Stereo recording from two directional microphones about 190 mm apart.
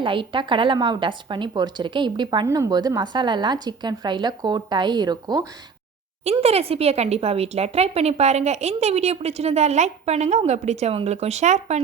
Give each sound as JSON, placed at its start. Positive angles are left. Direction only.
{"t": 0.0, "sound": "a woman's voice", "side_deg": -25}
{"t": 6.2, "sound": "speech", "side_deg": -35}